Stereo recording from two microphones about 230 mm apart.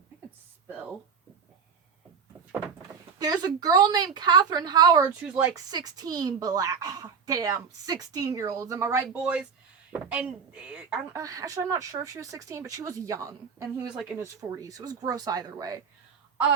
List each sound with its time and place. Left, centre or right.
3.2 s speech: centre